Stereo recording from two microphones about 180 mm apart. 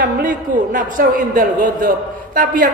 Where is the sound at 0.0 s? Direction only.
50° right (ahead or behind).